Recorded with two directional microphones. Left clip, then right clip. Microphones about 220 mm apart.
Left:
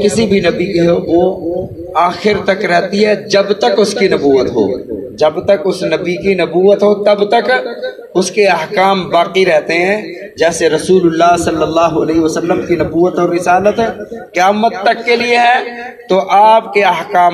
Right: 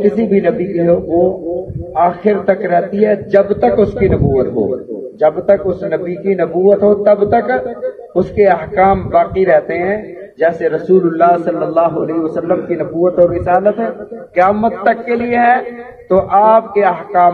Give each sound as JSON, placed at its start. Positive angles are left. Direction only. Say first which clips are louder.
{"t": 0.0, "sound": "speech", "louder": "left 1 dB", "side_deg": 30}